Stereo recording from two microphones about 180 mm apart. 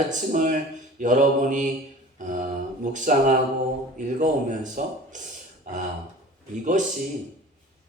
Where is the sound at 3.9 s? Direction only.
45° right (ahead or behind).